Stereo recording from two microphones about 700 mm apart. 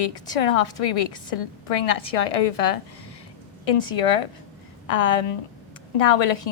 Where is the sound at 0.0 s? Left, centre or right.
Left.